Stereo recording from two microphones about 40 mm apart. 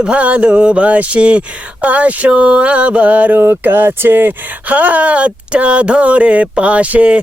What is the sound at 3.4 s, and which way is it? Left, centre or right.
Speech, right.